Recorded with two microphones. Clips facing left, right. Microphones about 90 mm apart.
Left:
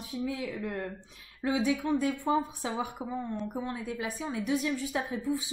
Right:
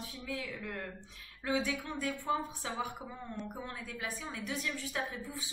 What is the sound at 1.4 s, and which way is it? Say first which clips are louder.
A woman's voice: left 6 dB; 15° left (ahead or behind).